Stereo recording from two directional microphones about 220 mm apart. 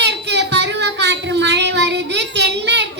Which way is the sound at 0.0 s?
50° right (ahead or behind).